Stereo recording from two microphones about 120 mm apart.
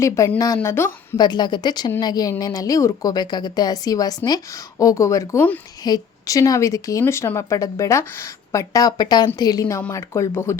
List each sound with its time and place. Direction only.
0.3 s a woman's voice: 25° left (ahead or behind)
1.1 s a woman's voice: 35° left (ahead or behind)